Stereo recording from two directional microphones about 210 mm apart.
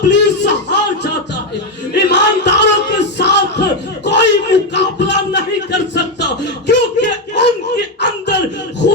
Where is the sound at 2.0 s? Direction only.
55° left (ahead or behind).